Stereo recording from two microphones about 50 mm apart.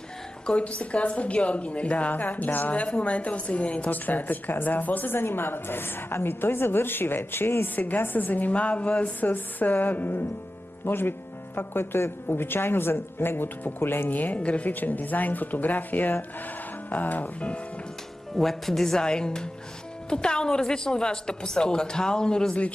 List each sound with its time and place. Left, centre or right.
0.5 s a woman's voice: left
7.7 s a woman's voice: left
9.2 s a woman's voice: left
18.3 s a woman's voice: centre